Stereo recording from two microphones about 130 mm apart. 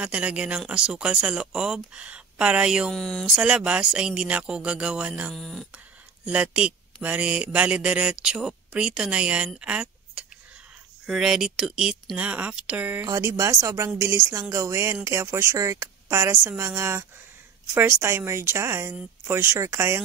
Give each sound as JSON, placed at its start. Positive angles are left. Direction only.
{"t": 0.0, "sound": "speech", "side_deg": -10}
{"t": 2.9, "sound": "speech", "side_deg": 5}
{"t": 3.3, "sound": "speech", "side_deg": -5}
{"t": 5.3, "sound": "speech", "side_deg": 5}
{"t": 6.2, "sound": "speech", "side_deg": -10}
{"t": 13.0, "sound": "speech", "side_deg": -25}